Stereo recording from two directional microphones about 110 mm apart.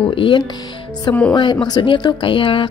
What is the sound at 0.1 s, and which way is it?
A woman's voice, 50° left (ahead or behind).